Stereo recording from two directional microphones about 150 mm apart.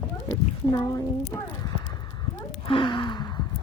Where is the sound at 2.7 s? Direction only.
35° left (ahead or behind).